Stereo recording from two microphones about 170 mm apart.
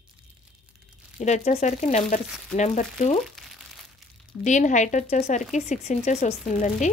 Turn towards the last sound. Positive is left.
turn(degrees=45)  # may be behind; listen again after turning